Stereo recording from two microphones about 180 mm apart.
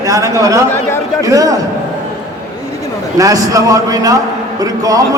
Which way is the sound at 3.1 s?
20° right (ahead or behind).